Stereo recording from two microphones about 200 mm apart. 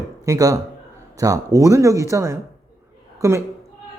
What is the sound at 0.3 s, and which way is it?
A woman's voice, 15° right (ahead or behind).